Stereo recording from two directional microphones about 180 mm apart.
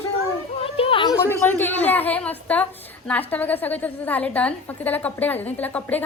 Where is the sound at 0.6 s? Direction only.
30° left (ahead or behind).